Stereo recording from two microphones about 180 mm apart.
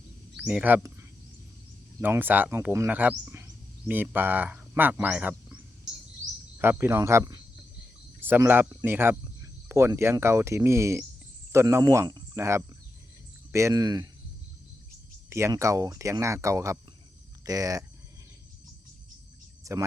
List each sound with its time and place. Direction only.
0.4 s speech: 10° right (ahead or behind)
2.0 s speech: 10° right (ahead or behind)
6.6 s speech: 15° right (ahead or behind)
15.3 s speech: 15° right (ahead or behind)
19.6 s a sound: 15° right (ahead or behind)